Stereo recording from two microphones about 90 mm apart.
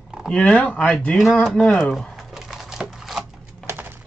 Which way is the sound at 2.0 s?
5° right (ahead or behind).